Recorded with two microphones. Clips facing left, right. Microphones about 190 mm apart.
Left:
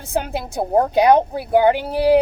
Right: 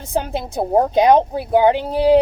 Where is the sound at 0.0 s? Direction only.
25° right (ahead or behind).